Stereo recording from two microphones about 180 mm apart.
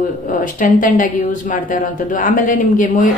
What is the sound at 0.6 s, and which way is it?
Speech, 45° left (ahead or behind).